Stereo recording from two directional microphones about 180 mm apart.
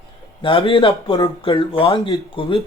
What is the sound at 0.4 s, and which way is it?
Speech, 30° left (ahead or behind).